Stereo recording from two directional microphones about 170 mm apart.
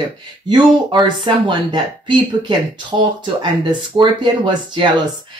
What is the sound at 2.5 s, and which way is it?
Speech, 25° right (ahead or behind).